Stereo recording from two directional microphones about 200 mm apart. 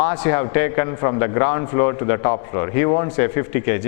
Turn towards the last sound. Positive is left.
turn(degrees=15)  # may be behind; listen again after turning